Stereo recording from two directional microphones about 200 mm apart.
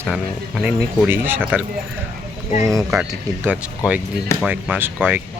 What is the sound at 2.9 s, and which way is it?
Speech, 5° right (ahead or behind).